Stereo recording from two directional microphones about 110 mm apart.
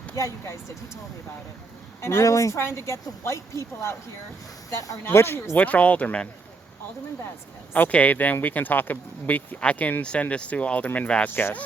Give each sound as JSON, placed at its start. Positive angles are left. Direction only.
{"t": 0.2, "sound": "speech", "side_deg": 25}
{"t": 2.0, "sound": "speech", "side_deg": 25}
{"t": 7.7, "sound": "speech", "side_deg": 15}